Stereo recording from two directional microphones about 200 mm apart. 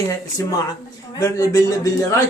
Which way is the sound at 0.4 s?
10° left (ahead or behind).